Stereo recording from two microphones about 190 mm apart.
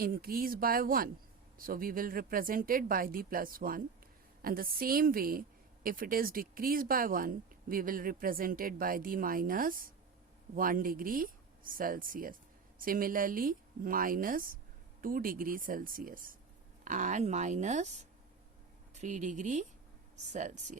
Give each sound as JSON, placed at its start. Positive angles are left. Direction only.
{"t": 0.0, "sound": "a woman's voice", "side_deg": -50}